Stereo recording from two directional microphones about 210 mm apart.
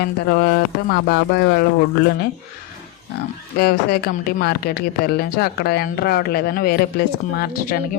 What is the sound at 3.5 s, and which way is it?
Speech, 45° left (ahead or behind).